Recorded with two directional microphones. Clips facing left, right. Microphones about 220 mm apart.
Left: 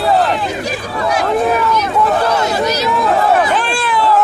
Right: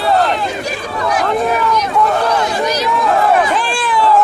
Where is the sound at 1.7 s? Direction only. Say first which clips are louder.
Even; 5° left (ahead or behind).